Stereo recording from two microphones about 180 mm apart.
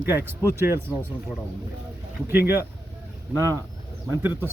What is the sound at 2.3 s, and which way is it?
Speech, 10° right (ahead or behind).